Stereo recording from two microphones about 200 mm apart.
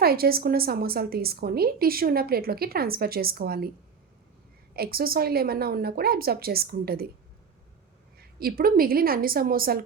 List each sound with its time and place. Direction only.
0.0 s a woman's voice: 50° right (ahead or behind)
4.7 s a woman's voice: 50° right (ahead or behind)
8.2 s a woman's voice: 50° right (ahead or behind)